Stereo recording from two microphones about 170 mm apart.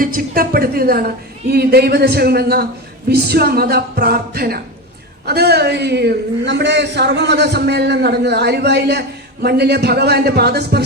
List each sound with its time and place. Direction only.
0.0 s a woman's voice: 60° right (ahead or behind)